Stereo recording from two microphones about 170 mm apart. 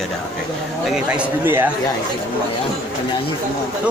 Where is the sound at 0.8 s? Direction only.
5° right (ahead or behind).